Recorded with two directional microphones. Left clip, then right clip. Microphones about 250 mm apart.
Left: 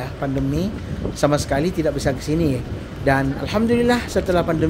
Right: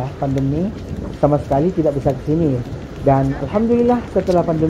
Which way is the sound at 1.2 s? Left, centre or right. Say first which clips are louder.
Right 3 dB; centre.